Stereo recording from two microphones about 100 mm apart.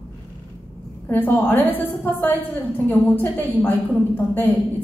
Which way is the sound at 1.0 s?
20° left (ahead or behind).